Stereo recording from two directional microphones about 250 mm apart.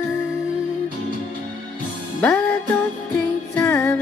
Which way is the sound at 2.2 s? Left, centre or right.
Centre.